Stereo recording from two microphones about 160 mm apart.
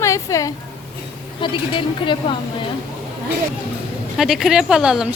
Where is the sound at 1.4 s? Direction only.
30° left (ahead or behind).